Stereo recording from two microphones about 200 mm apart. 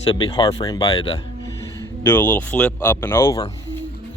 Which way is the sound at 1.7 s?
10° left (ahead or behind).